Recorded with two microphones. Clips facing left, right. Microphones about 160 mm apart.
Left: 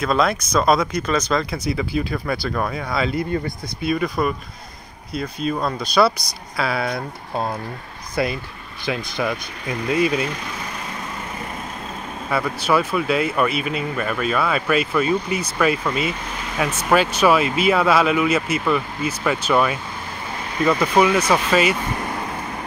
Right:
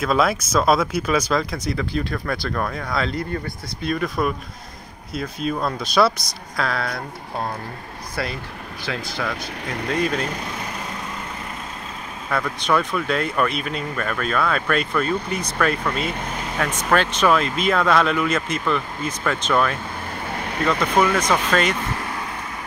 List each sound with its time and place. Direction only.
0.0 s speech: 5° right (ahead or behind)
8.2 s speech: 15° left (ahead or behind)
12.3 s speech: 5° left (ahead or behind)